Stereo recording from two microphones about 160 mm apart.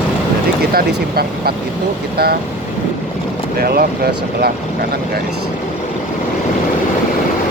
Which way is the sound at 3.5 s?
70° right (ahead or behind).